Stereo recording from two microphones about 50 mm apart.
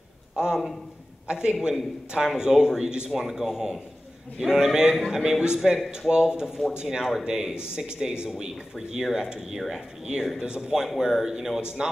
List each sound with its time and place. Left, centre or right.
0.4 s a man's voice: centre
3.1 s a man's voice: centre
7.2 s a man's voice: centre